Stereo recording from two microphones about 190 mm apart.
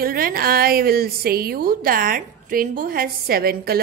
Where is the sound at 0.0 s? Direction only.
50° right (ahead or behind).